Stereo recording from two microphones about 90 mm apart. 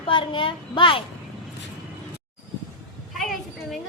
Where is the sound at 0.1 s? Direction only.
70° left (ahead or behind).